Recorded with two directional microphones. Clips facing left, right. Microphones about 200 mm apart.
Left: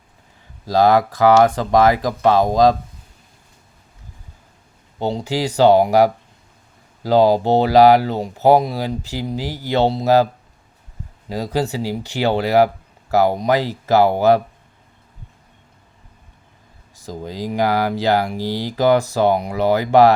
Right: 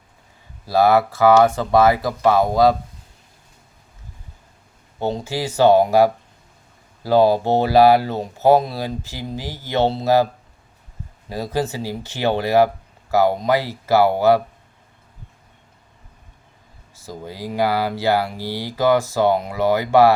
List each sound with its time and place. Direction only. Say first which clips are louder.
0.6 s speech: left 1 dB; 15° left (ahead or behind)
4.9 s speech: left 2 dB; 15° left (ahead or behind)
11.3 s speech: left 2 dB; 15° left (ahead or behind)
17.1 s speech: left 4 dB; 15° left (ahead or behind)